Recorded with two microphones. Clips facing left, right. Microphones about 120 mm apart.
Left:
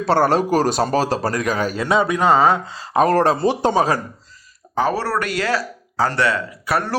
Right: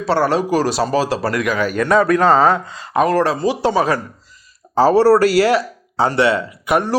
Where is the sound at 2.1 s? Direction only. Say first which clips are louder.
Even; 10° left (ahead or behind).